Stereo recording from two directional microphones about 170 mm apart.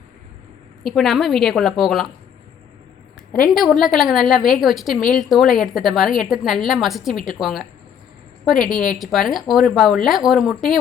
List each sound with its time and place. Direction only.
0.9 s speech: centre (ahead or behind)
3.5 s speech: centre (ahead or behind)
8.5 s a woman's voice: 55° left (ahead or behind)
9.0 s speech: centre (ahead or behind)